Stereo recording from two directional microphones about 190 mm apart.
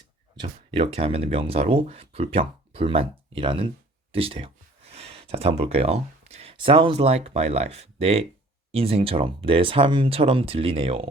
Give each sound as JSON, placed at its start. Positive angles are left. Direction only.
{"t": 0.3, "sound": "speech", "side_deg": -30}